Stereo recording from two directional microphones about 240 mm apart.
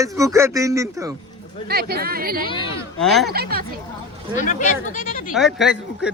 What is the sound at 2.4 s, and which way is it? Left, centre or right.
Speech, left.